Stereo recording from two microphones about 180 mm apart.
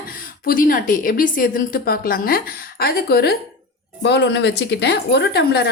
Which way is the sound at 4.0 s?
75° left (ahead or behind).